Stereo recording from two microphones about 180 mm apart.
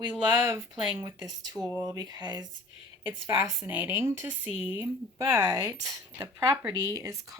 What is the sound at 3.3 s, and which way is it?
Speech, 15° right (ahead or behind).